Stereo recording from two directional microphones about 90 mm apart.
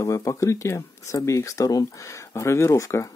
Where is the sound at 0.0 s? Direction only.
35° left (ahead or behind).